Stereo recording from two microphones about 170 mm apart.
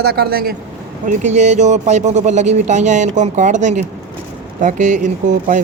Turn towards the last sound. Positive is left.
turn(degrees=-45)  # may be behind; listen again after turning